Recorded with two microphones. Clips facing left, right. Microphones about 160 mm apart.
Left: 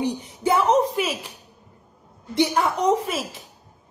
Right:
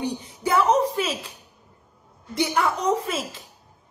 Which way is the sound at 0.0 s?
20° left (ahead or behind).